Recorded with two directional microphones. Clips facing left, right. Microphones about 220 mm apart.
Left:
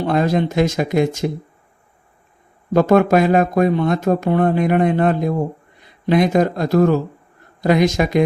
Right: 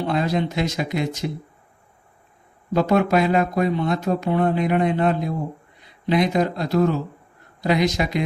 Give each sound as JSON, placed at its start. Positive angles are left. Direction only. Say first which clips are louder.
{"t": 0.0, "sound": "speech", "louder": "left 5 dB", "side_deg": 50}
{"t": 2.7, "sound": "speech", "louder": "left 5 dB", "side_deg": 50}